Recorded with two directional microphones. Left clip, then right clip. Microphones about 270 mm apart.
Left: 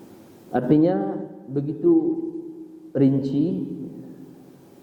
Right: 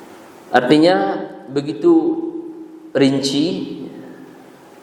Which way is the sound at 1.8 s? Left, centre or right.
Right.